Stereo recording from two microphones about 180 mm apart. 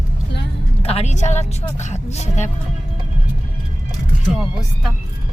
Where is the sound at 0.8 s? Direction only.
35° left (ahead or behind).